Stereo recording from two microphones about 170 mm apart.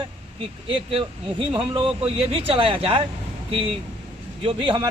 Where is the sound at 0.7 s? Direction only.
30° right (ahead or behind).